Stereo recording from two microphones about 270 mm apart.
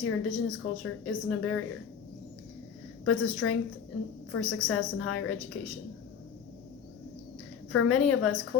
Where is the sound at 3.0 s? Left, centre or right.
Left.